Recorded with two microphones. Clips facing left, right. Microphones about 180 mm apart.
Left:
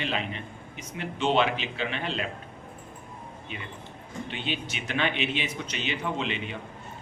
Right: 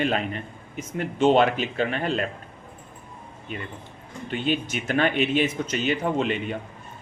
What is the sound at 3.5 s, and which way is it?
Speech, 45° right (ahead or behind).